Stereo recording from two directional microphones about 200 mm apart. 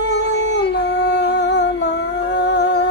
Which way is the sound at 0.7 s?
55° left (ahead or behind).